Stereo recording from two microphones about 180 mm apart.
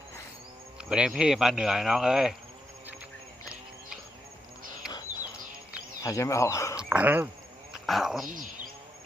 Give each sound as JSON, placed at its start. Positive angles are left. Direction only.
{"t": 0.9, "sound": "speech", "side_deg": -5}
{"t": 6.0, "sound": "speech", "side_deg": 15}
{"t": 6.7, "sound": "speech", "side_deg": -10}
{"t": 8.3, "sound": "speech", "side_deg": -50}